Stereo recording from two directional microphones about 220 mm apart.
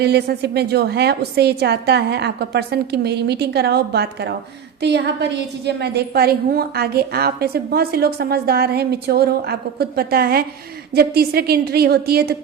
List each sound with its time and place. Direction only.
0.0 s a woman's voice: 45° right (ahead or behind)